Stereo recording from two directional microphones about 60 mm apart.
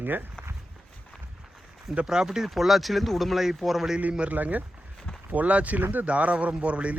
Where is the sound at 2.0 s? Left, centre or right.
Centre.